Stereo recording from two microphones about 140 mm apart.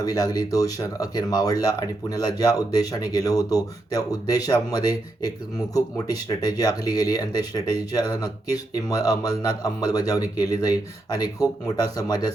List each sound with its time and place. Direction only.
0.0 s speech: 25° left (ahead or behind)